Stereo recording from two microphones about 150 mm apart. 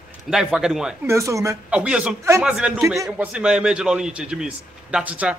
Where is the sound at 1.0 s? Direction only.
20° right (ahead or behind).